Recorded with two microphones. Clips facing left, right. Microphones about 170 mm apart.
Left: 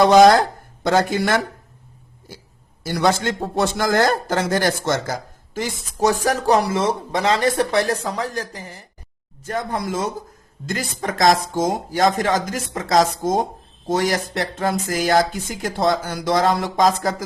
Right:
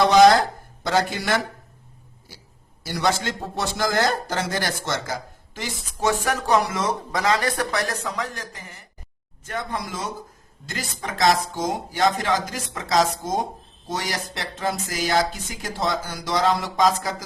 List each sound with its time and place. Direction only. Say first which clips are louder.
0.1 s speech: left 3 dB; 50° left (ahead or behind)
2.8 s speech: left 4 dB; 55° left (ahead or behind)
5.5 s speech: left 7 dB; 40° left (ahead or behind)